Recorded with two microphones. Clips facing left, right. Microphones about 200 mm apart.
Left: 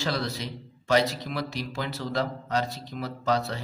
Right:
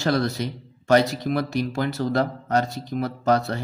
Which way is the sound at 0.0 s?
50° right (ahead or behind).